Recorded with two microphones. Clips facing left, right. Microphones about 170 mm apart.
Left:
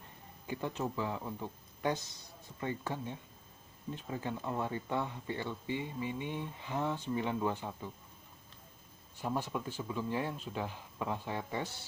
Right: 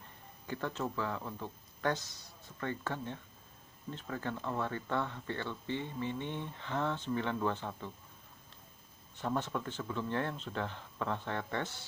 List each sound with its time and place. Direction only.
0.5 s speech: 15° left (ahead or behind)
9.1 s speech: 10° left (ahead or behind)